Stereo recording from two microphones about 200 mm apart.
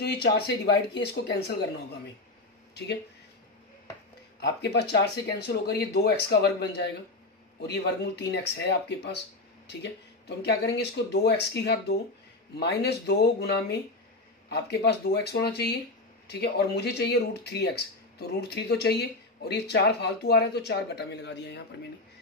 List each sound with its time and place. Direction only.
0.0 s speech: 55° left (ahead or behind)
4.4 s speech: 55° left (ahead or behind)